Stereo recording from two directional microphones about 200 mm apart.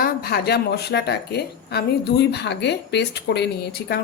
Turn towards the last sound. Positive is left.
turn(degrees=55)  # may be behind; listen again after turning